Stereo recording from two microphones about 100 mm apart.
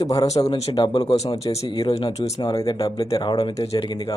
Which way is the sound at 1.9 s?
80° left.